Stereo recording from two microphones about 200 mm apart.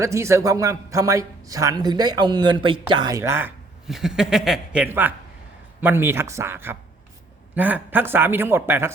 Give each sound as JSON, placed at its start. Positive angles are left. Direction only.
{"t": 0.0, "sound": "speech", "side_deg": -15}